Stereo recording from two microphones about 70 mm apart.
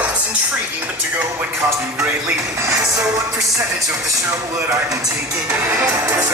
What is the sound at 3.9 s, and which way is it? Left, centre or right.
Speech, right.